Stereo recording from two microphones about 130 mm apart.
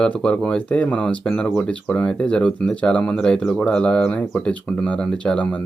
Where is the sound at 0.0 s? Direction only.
5° left (ahead or behind).